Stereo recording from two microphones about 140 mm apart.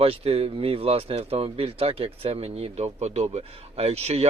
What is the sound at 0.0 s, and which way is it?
Speech, 45° right (ahead or behind).